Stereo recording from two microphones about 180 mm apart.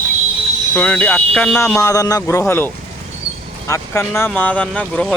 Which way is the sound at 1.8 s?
20° left (ahead or behind).